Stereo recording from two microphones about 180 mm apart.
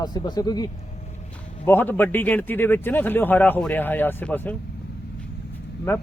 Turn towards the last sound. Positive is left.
turn(degrees=10)  # may be behind; listen again after turning